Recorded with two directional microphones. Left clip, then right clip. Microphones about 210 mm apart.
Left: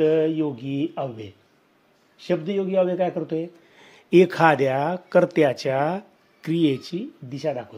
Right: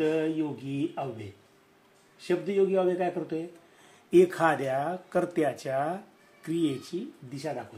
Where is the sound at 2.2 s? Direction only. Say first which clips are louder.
Left 2 dB; 40° left (ahead or behind).